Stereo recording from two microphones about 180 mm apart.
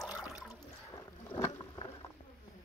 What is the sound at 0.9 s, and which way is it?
Rowboat, 15° left (ahead or behind).